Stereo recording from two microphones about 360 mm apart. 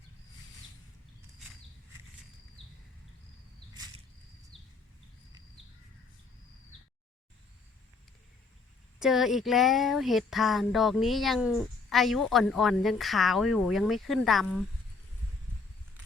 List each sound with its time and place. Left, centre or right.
9.0 s speech: centre